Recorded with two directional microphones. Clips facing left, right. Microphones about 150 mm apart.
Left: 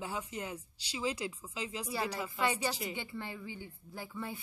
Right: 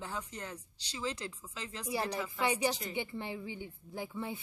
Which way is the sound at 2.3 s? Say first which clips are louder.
Right 2 dB; 15° right (ahead or behind).